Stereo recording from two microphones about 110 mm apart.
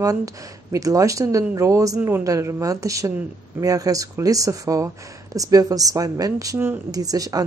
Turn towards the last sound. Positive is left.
turn(degrees=-35)  # may be behind; listen again after turning